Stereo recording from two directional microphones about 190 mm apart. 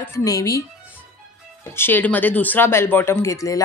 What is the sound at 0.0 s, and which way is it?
Speech, 15° left (ahead or behind).